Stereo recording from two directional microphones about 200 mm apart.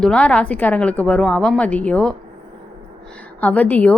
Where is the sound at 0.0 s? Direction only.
5° left (ahead or behind).